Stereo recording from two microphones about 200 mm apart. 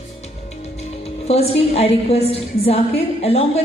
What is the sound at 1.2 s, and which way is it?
A woman's voice, 30° left (ahead or behind).